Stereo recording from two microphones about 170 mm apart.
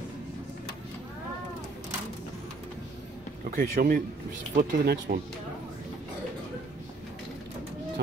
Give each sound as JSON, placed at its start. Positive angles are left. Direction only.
{"t": 3.4, "sound": "speech", "side_deg": -55}